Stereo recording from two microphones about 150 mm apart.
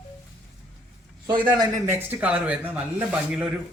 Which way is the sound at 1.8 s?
15° right (ahead or behind).